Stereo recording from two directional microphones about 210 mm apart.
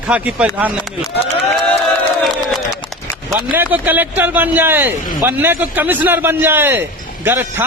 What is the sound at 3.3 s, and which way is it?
Speech, 10° right (ahead or behind).